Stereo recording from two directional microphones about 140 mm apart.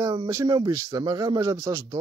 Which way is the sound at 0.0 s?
30° right (ahead or behind).